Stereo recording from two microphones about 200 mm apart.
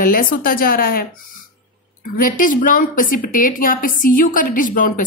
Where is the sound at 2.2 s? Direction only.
45° left (ahead or behind).